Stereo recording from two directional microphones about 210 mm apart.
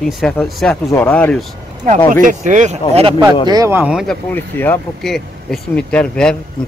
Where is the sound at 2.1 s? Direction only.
35° right (ahead or behind).